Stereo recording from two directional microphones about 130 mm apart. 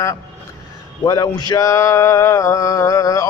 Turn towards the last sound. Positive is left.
turn(degrees=25)  # may be behind; listen again after turning